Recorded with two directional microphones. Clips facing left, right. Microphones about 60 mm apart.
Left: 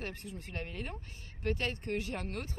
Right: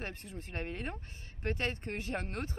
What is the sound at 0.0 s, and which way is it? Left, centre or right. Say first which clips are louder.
Speech: left 1 dB; right.